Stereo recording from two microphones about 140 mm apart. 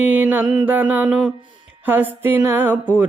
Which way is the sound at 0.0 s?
10° right (ahead or behind).